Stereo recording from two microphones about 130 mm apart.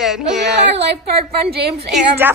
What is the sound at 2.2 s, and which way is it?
Speech, 15° right (ahead or behind).